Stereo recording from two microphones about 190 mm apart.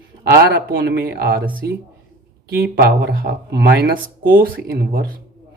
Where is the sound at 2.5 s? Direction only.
55° right (ahead or behind).